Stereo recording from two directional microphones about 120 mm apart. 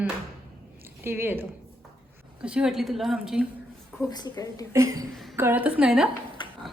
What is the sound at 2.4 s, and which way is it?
A woman's voice, 10° right (ahead or behind).